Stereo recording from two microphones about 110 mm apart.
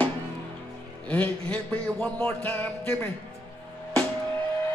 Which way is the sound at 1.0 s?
15° left (ahead or behind).